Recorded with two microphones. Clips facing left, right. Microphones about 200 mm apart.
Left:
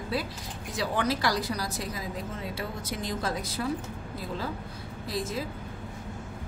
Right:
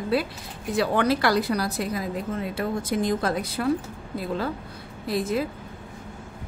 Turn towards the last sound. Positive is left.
turn(degrees=-60)  # may be behind; listen again after turning